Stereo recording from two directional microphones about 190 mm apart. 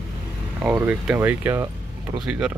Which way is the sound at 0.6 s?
10° right (ahead or behind).